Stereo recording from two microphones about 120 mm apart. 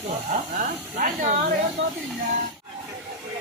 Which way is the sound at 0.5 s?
90° right.